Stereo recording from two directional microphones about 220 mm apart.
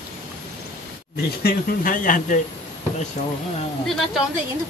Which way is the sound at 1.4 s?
40° left (ahead or behind).